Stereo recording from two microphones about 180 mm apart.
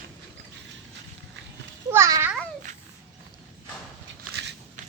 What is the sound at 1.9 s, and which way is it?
Babbling, 15° right (ahead or behind).